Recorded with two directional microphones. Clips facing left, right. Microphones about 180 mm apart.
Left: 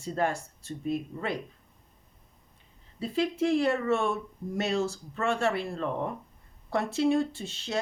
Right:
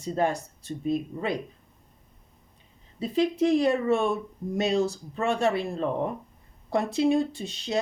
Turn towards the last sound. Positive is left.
turn(degrees=-15)  # may be behind; listen again after turning